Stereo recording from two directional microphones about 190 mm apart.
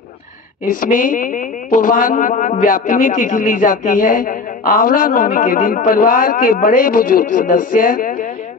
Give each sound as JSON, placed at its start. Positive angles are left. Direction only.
{"t": 0.7, "sound": "a woman's voice", "side_deg": 45}